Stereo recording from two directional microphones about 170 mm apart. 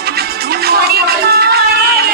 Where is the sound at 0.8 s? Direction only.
65° right (ahead or behind).